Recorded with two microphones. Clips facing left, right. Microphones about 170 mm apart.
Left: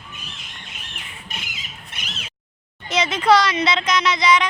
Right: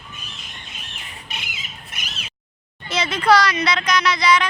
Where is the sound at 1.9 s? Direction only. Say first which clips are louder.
Right 1 dB; 30° left (ahead or behind).